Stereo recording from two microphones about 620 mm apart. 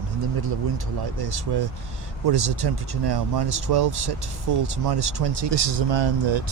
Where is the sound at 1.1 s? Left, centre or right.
Right.